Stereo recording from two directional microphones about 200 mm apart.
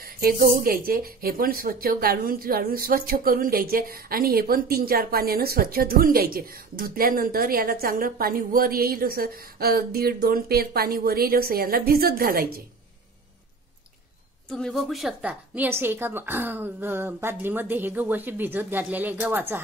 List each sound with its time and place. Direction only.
0.0 s speech: 45° right (ahead or behind)
14.5 s a woman's voice: centre (ahead or behind)